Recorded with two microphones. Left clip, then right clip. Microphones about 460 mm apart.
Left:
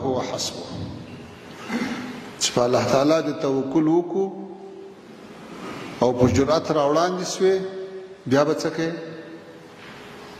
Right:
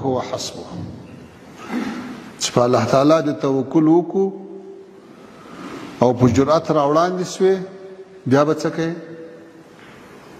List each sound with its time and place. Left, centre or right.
0.0 s a man's voice: right
2.3 s a man's voice: right
5.9 s a man's voice: right